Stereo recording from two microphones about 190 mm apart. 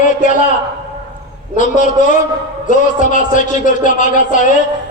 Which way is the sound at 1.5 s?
45° left (ahead or behind).